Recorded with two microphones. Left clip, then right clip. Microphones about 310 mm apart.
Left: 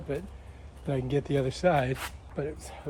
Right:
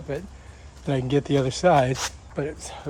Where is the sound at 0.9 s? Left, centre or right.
Right.